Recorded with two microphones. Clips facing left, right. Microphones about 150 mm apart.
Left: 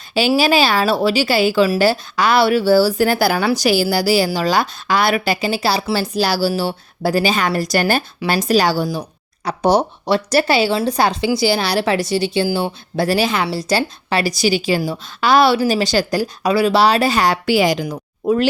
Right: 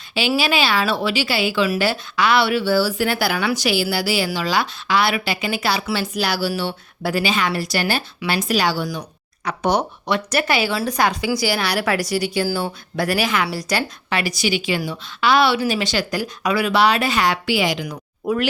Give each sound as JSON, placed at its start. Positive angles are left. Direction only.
{"t": 0.1, "sound": "a woman's voice", "side_deg": 40}
{"t": 18.2, "sound": "speech", "side_deg": 25}